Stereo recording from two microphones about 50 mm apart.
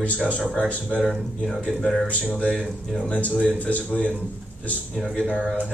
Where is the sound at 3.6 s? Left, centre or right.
Left.